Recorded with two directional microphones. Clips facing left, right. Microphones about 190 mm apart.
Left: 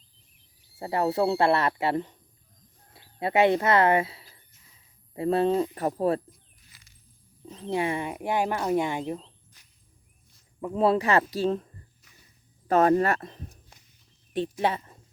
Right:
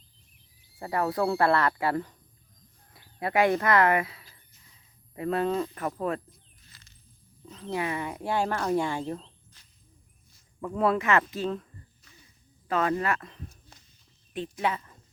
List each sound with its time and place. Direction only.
0.8 s speech: 25° left (ahead or behind)
6.6 s coin: 10° left (ahead or behind)
7.5 s speech: 25° left (ahead or behind)
10.6 s speech: 20° left (ahead or behind)
13.5 s a sound: 15° left (ahead or behind)
14.6 s speech: 30° left (ahead or behind)